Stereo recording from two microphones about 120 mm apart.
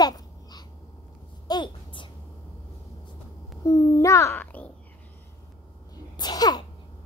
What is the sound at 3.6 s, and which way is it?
A child's voice, 25° left (ahead or behind).